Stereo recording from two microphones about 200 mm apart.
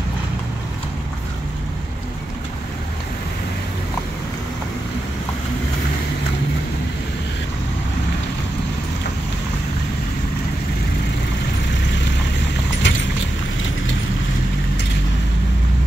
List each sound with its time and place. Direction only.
12.8 s vehicle: 65° left (ahead or behind)